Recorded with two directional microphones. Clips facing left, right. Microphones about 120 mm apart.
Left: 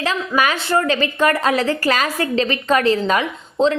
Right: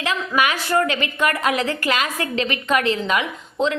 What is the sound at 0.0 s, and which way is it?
A woman's voice, 35° left (ahead or behind).